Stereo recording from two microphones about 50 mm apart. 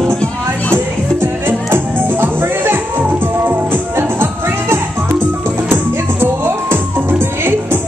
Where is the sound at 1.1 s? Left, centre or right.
Right.